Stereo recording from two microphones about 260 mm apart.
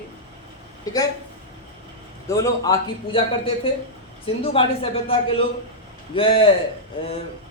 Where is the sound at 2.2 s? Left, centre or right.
Centre.